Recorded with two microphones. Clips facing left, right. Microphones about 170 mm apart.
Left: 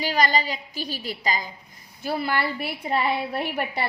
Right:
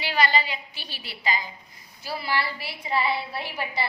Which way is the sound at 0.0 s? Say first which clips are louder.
Left 2 dB; 40° left (ahead or behind).